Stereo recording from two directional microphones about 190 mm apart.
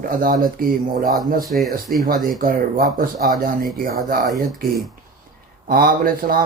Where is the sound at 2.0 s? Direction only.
50° right (ahead or behind).